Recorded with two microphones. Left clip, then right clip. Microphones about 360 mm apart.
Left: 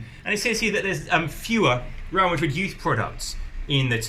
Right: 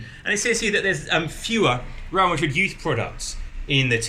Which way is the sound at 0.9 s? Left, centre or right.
Centre.